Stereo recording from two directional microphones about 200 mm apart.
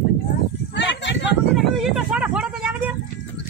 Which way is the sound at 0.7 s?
60° left (ahead or behind).